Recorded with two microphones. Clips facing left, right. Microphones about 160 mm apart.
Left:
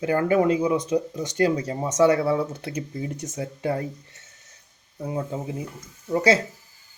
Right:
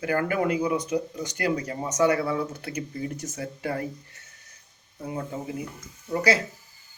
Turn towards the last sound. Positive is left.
turn(degrees=25)  # may be behind; listen again after turning